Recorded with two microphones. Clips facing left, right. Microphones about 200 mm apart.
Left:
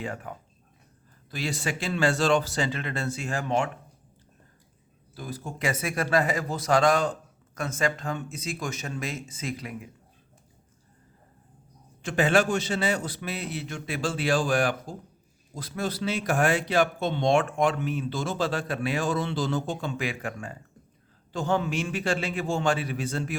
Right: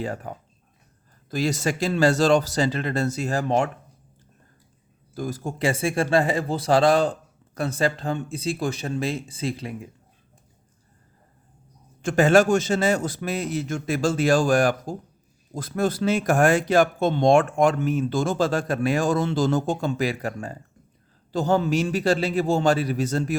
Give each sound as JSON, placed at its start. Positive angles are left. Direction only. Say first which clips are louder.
{"t": 0.0, "sound": "speech", "louder": "right 5 dB", "side_deg": -35}
{"t": 5.1, "sound": "speech", "louder": "right 7 dB", "side_deg": -45}
{"t": 12.0, "sound": "speech", "louder": "right 6 dB", "side_deg": -45}